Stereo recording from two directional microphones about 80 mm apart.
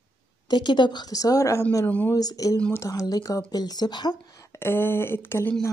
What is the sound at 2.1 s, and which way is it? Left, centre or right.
A woman's voice, left.